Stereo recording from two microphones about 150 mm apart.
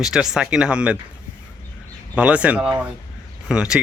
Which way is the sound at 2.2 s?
10° right (ahead or behind).